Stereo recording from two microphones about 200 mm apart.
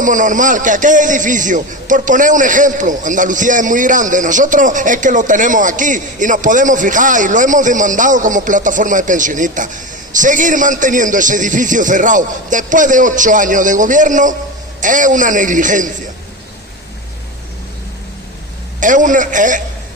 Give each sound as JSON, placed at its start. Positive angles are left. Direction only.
{"t": 0.0, "sound": "a man's voice", "side_deg": -40}
{"t": 18.8, "sound": "a man's voice", "side_deg": -40}